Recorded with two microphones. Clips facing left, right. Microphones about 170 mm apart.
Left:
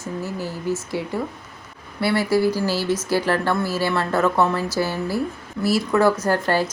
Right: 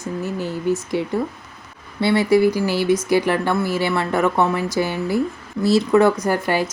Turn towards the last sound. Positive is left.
turn(degrees=-15)  # may be behind; listen again after turning